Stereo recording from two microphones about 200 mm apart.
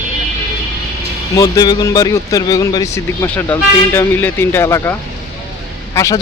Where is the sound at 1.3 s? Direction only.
15° left (ahead or behind).